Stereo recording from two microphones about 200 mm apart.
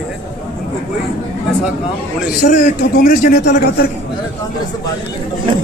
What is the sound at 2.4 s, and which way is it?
Speech, 45° left (ahead or behind).